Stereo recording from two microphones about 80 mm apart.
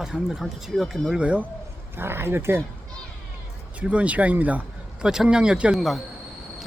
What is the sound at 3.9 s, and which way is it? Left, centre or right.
Speech, centre.